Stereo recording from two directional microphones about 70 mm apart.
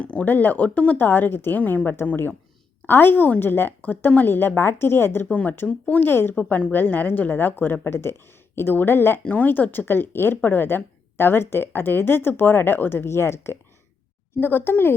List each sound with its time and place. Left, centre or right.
0.0 s a woman's voice: centre
5.3 s a woman's voice: left
9.2 s speech: left
14.3 s speech: left